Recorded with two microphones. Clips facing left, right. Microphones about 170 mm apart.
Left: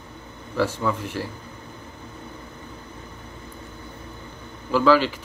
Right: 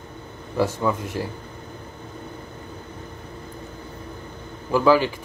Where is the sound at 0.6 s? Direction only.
15° right (ahead or behind).